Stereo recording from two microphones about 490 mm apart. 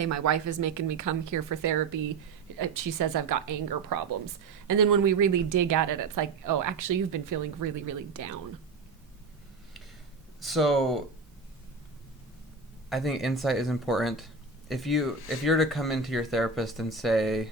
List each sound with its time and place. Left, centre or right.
0.0 s speech: right
10.4 s speech: centre
12.9 s speech: centre